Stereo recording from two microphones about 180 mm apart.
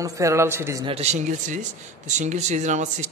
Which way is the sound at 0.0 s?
20° right (ahead or behind).